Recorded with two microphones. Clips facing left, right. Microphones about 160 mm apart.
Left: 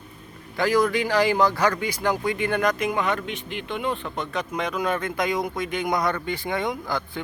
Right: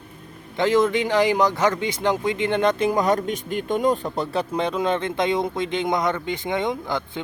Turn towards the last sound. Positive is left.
turn(degrees=-20)  # may be behind; listen again after turning